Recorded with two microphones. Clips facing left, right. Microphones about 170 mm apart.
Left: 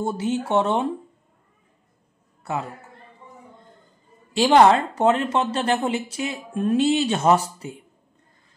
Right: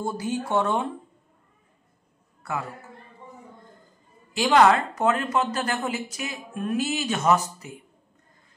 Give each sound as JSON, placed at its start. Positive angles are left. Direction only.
{"t": 0.0, "sound": "speech", "side_deg": 25}
{"t": 4.3, "sound": "speech", "side_deg": 30}